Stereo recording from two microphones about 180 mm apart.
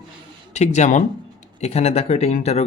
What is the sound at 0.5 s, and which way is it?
Speech, 40° left (ahead or behind).